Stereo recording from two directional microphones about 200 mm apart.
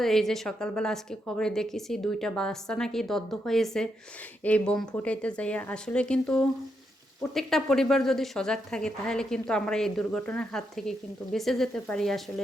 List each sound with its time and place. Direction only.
0.0 s a woman's voice: centre (ahead or behind)